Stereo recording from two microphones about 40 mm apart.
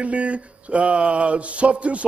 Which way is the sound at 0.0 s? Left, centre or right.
Right.